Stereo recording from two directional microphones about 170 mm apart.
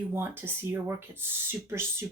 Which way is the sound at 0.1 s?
15° right (ahead or behind).